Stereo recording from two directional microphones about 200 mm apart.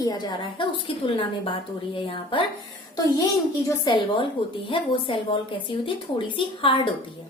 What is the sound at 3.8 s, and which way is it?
A woman's voice, 25° left (ahead or behind).